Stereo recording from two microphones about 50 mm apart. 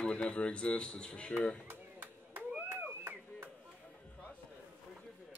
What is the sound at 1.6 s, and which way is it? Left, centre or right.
Chop, right.